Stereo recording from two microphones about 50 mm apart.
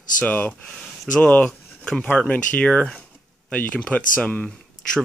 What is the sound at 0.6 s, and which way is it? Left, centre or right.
Speech, centre.